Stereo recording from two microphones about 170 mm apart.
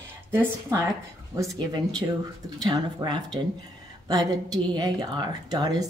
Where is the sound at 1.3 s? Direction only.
20° right (ahead or behind).